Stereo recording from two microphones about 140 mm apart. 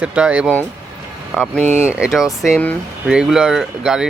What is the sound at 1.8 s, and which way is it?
A man's voice, 10° right (ahead or behind).